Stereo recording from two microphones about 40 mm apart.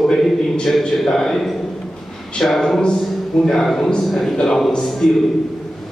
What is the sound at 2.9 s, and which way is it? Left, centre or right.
Speech, centre.